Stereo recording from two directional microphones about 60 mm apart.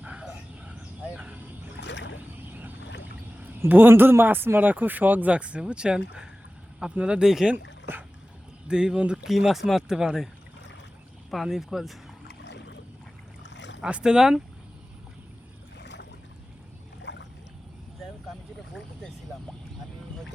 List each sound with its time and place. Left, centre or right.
0.0 s a sound: right
2.5 s vehicle: right
3.7 s speech: right; by 7.5 s centre
7.5 s speech: right
8.6 s speech: centre
9.3 s speech: centre
11.3 s speech: centre
13.8 s speech: centre